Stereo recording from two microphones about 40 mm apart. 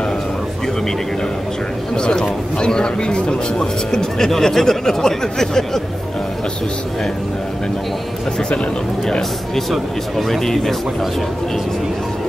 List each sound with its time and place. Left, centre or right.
2.0 s speech: left
9.7 s speech: centre